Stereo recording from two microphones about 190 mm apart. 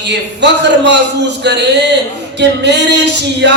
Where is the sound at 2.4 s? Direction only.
65° right (ahead or behind).